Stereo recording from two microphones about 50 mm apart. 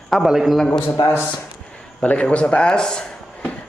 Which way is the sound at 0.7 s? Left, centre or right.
Left.